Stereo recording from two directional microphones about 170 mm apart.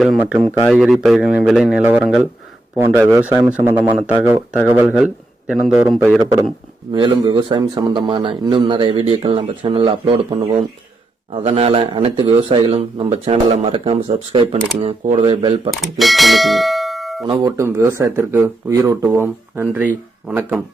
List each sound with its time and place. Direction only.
0.0 s speech: centre (ahead or behind)
2.7 s a man's voice: 15° right (ahead or behind)
6.9 s a man's voice: 25° right (ahead or behind)
15.7 s speech: centre (ahead or behind)
17.6 s speech: 15° right (ahead or behind)